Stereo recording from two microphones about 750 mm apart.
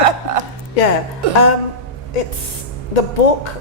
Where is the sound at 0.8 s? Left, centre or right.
Left.